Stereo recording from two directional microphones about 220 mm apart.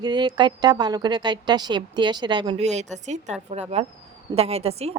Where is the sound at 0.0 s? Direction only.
20° right (ahead or behind).